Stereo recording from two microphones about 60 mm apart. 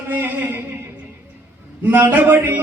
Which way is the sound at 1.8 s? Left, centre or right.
Right.